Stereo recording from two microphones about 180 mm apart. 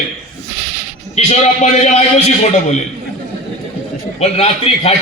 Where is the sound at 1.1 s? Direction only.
40° left (ahead or behind).